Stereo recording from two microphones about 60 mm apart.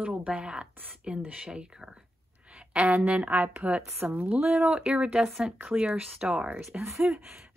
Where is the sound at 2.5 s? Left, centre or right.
Centre.